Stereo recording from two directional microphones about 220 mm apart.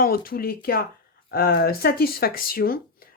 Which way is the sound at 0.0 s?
40° left (ahead or behind).